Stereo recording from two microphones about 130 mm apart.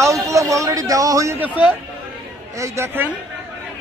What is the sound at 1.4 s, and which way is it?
Speech, 10° right (ahead or behind).